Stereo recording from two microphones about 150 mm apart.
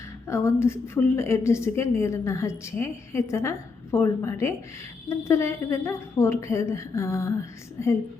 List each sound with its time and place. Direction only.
0.3 s a woman's voice: 20° left (ahead or behind)